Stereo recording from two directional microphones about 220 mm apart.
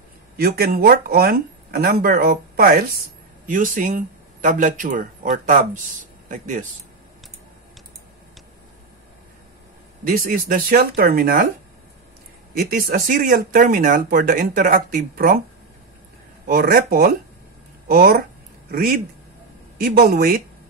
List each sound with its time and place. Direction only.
0.4 s speech: 45° right (ahead or behind)
10.0 s speech: 40° right (ahead or behind)
12.5 s speech: 40° right (ahead or behind)
16.4 s speech: 40° right (ahead or behind)